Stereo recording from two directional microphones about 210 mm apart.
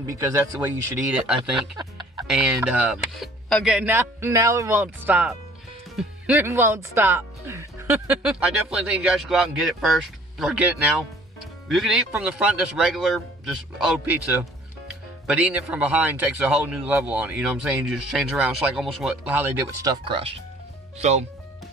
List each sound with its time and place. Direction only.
0.0 s speech: 15° right (ahead or behind)
1.6 s speech: 20° right (ahead or behind)
2.2 s speech: 5° right (ahead or behind)
15.2 s speech: 5° right (ahead or behind); by 21.3 s 30° right (ahead or behind)